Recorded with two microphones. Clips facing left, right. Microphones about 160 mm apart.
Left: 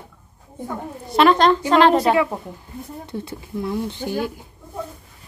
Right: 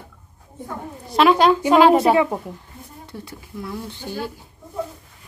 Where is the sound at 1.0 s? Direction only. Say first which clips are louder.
Even; centre (ahead or behind).